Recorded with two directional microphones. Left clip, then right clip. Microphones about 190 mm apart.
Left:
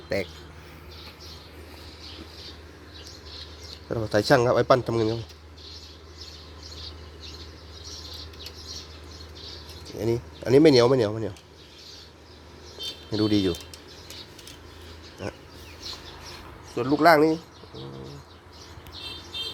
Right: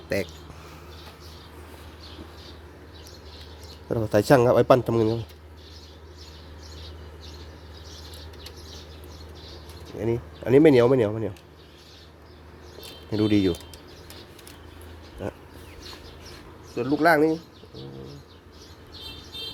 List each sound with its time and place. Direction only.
0.1 s speech: 30° right (ahead or behind)
3.8 s speech: 25° right (ahead or behind)
10.4 s speech: 10° right (ahead or behind)
13.1 s speech: 20° right (ahead or behind)
16.7 s speech: 10° left (ahead or behind)